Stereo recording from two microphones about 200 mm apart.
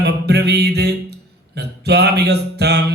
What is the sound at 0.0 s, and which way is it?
Music, 55° right (ahead or behind).